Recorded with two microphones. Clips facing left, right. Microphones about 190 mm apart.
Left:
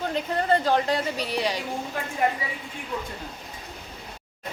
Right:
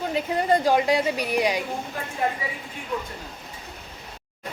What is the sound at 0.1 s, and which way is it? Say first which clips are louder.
A woman's voice: right 2 dB; 10° right (ahead or behind).